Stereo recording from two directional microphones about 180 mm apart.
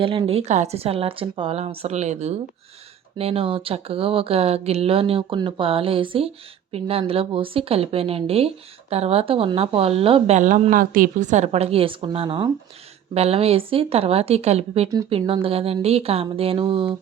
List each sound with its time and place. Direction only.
0.0 s speech: 30° right (ahead or behind)